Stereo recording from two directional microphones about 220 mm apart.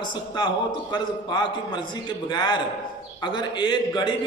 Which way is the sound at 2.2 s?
20° left (ahead or behind).